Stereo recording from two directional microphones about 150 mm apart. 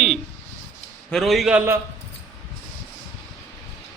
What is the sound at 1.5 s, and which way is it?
Speech, 15° right (ahead or behind).